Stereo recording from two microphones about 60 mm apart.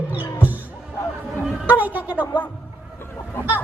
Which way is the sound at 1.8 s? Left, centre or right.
Right.